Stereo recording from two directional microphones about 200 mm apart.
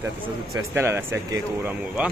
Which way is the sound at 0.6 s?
10° right (ahead or behind).